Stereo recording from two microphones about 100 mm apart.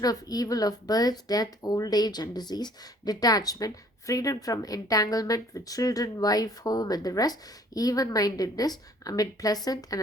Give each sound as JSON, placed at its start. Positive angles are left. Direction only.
{"t": 0.0, "sound": "speech", "side_deg": 40}